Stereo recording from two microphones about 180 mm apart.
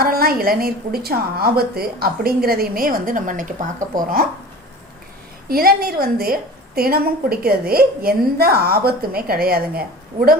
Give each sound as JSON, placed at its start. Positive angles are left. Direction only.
{"t": 0.0, "sound": "a woman's voice", "side_deg": -55}
{"t": 5.5, "sound": "a woman's voice", "side_deg": -55}